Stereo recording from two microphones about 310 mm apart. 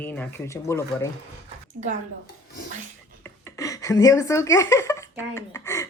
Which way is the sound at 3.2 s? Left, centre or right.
Centre.